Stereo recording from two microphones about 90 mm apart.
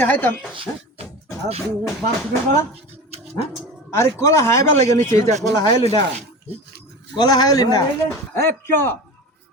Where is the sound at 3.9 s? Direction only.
35° left (ahead or behind); by 6.0 s 50° left (ahead or behind).